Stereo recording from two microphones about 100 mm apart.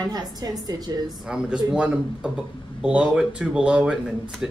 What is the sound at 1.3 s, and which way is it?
Speech, 10° right (ahead or behind).